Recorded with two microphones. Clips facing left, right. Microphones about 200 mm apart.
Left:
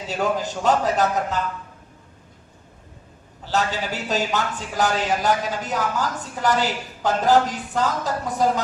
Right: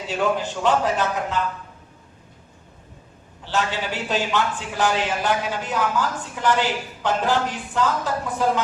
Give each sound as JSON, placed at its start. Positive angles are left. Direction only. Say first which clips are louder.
{"t": 0.1, "sound": "a man's voice", "louder": "right 1 dB", "side_deg": 40}
{"t": 3.4, "sound": "a man's voice", "louder": "left 1 dB", "side_deg": 40}